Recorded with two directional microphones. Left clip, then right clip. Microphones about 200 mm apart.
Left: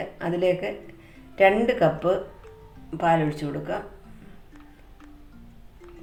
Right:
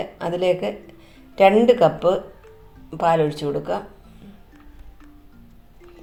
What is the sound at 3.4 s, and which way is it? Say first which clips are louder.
Speech: right 8 dB; 20° right (ahead or behind).